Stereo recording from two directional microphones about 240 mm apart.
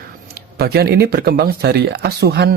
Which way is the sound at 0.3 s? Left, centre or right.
Right.